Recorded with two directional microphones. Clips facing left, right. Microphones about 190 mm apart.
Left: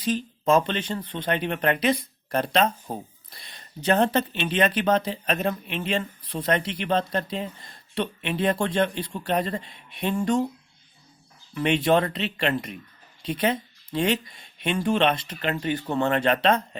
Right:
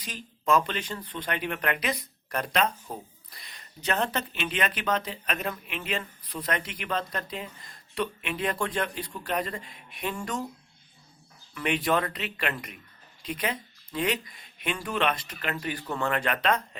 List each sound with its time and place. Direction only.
0.0 s speech: 30° left (ahead or behind)
11.5 s speech: 25° left (ahead or behind)